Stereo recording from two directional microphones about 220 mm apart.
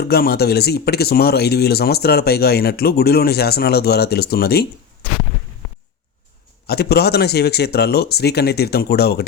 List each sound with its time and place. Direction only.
0.0 s speech: 45° left (ahead or behind)
6.7 s speech: 45° left (ahead or behind)